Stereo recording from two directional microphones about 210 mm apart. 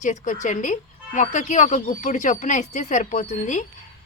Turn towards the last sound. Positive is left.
turn(degrees=35)  # may be behind; listen again after turning